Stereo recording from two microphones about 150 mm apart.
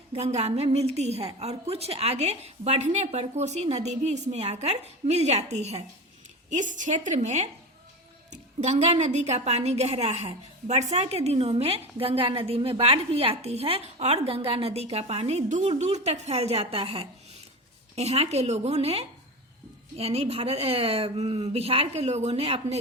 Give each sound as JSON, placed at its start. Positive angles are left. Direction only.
{"t": 0.1, "sound": "a woman's voice", "side_deg": -45}